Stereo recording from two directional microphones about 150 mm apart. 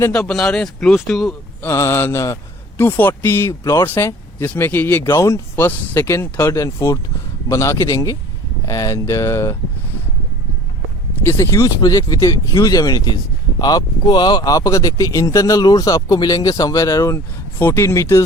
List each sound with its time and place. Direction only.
0.1 s speech: 5° left (ahead or behind)
1.6 s speech: 15° left (ahead or behind)
11.3 s speech: 20° left (ahead or behind)